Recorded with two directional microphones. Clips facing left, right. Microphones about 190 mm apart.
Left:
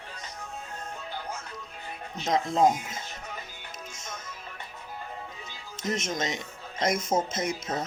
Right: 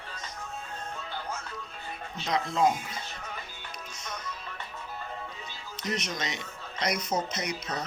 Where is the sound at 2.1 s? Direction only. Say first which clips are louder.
Left 3 dB; 45° left (ahead or behind).